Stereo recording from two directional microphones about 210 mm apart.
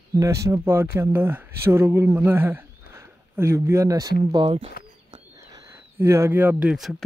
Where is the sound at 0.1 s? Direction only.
15° right (ahead or behind).